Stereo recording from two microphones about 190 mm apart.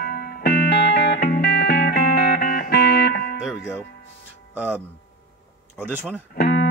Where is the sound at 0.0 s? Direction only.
55° left (ahead or behind).